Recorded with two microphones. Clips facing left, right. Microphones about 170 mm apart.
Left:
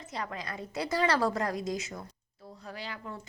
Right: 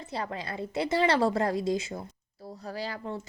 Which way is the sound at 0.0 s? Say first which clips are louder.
Right 3 dB; 30° right (ahead or behind).